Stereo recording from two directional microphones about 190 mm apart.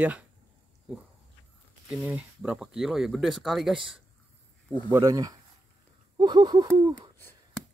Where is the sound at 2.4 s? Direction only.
Centre (ahead or behind).